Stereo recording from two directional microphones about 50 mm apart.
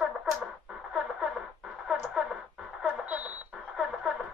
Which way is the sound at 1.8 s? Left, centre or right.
Centre.